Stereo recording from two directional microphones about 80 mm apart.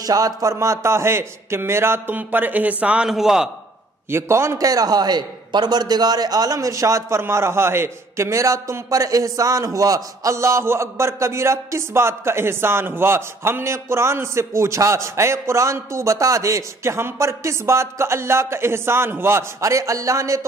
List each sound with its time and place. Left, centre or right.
0.0 s a man's voice: right; by 3.4 s centre
4.1 s a man's voice: right